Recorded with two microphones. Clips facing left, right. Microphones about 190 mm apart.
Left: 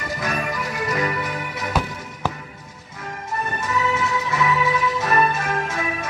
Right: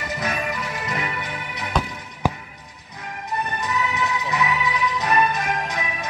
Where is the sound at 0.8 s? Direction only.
40° left (ahead or behind).